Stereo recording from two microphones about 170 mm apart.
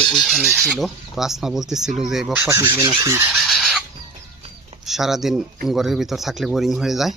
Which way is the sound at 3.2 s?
Centre (ahead or behind).